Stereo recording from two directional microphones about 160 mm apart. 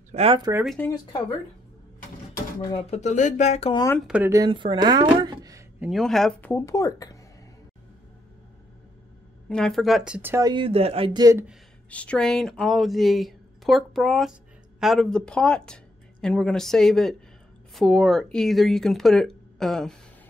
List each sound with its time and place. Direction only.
0.1 s speech: 40° right (ahead or behind)
0.8 s speech: 10° left (ahead or behind)
2.7 s speech: 45° left (ahead or behind)
4.1 s speech: 15° right (ahead or behind)
4.5 s speech: 30° right (ahead or behind)
5.8 s speech: centre (ahead or behind)
6.5 s speech: 20° left (ahead or behind)
9.5 s speech: 5° left (ahead or behind)
10.4 s speech: 30° right (ahead or behind)
11.1 s speech: 20° right (ahead or behind)
11.9 s speech: 10° left (ahead or behind)